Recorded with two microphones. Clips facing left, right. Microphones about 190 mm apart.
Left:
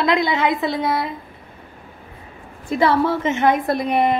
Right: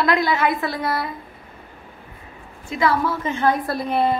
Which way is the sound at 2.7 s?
30° left (ahead or behind).